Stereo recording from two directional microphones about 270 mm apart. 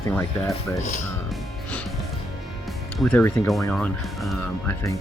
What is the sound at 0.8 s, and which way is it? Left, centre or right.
Speech, left.